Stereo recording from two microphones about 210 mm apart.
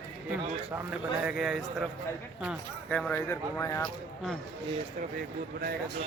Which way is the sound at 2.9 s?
5° left (ahead or behind).